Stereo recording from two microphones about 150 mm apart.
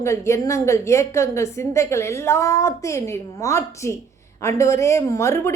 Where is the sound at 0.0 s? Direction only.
20° left (ahead or behind).